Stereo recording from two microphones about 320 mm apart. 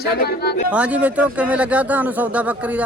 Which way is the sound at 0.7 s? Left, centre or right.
Centre.